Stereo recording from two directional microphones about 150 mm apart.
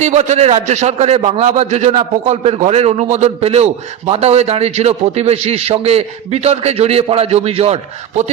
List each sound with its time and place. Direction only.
0.0 s a man's voice: 50° right (ahead or behind)